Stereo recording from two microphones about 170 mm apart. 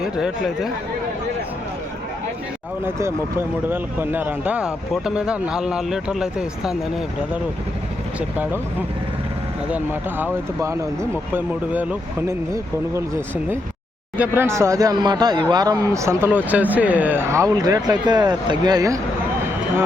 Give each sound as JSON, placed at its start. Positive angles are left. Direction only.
{"t": 0.0, "sound": "speech", "side_deg": -5}
{"t": 2.8, "sound": "speech", "side_deg": -15}
{"t": 10.6, "sound": "speech", "side_deg": -15}